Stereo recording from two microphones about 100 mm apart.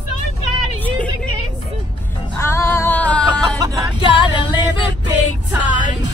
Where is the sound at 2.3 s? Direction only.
25° left (ahead or behind).